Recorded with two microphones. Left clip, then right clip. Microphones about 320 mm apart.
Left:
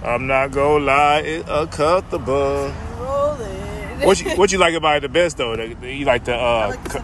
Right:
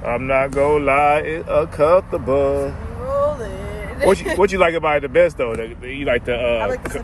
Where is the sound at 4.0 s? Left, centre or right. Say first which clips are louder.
Even; centre.